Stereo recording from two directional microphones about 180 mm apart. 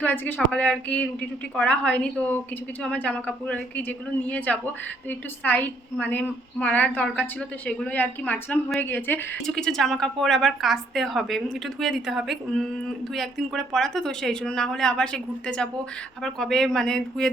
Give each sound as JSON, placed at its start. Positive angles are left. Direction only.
{"t": 0.0, "sound": "a woman's voice", "side_deg": 10}